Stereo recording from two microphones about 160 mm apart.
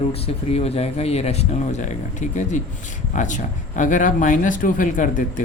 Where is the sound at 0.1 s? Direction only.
40° left (ahead or behind).